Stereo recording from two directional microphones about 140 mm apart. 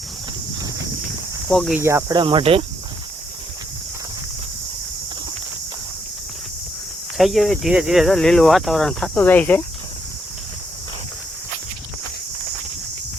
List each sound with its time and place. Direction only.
1.5 s cricket: centre (ahead or behind)
1.8 s cricket: 20° right (ahead or behind)
2.1 s cricket: 35° right (ahead or behind)
7.2 s speech: centre (ahead or behind)